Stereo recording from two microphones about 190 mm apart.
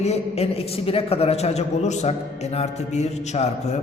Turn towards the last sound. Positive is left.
turn(degrees=35)  # may be behind; listen again after turning